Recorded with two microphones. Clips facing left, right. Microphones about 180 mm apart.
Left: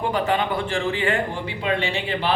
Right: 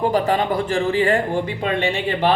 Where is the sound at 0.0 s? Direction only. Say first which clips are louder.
Right 4 dB; 40° right (ahead or behind).